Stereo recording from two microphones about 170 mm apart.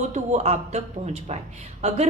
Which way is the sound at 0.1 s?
40° right (ahead or behind).